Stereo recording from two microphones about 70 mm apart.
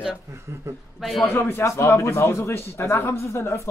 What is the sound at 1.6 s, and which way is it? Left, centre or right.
A man's voice, left.